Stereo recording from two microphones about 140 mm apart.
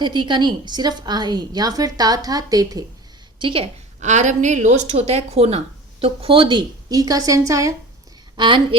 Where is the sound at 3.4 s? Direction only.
40° right (ahead or behind).